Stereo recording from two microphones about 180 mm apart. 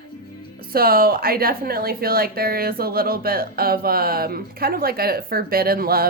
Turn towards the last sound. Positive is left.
turn(degrees=-55)  # may be behind; listen again after turning